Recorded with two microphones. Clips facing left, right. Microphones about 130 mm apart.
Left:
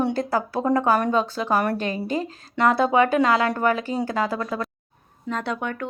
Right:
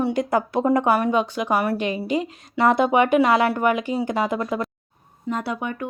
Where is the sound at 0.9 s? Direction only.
10° right (ahead or behind).